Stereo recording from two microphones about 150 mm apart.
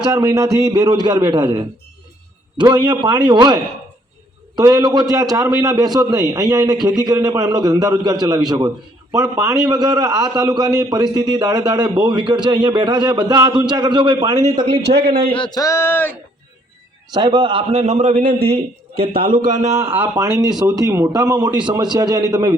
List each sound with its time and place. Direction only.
0.0 s a man's voice: 25° right (ahead or behind)
14.8 s a man's voice: 90° right
15.3 s a man's voice: 30° left (ahead or behind); by 16.1 s 15° left (ahead or behind)
17.1 s a man's voice: 30° right (ahead or behind); by 18.4 s 70° right (ahead or behind)
18.4 s a man's voice: 40° right (ahead or behind)
19.0 s a man's voice: 70° right (ahead or behind)
20.2 s a man's voice: 30° right (ahead or behind)